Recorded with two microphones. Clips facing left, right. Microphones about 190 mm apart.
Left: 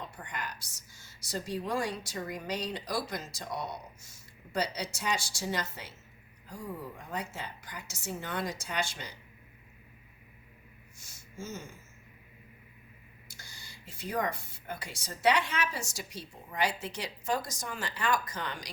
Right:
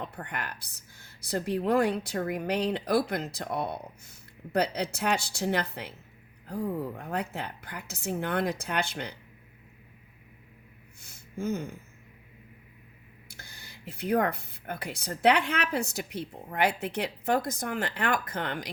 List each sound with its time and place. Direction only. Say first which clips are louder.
0.2 s speech: right 3 dB; 60° right (ahead or behind)
11.0 s a sound: right 10 dB; 60° right (ahead or behind)
13.3 s speech: right 3 dB; 60° right (ahead or behind)